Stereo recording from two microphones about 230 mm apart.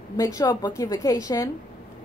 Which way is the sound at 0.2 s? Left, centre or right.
Centre.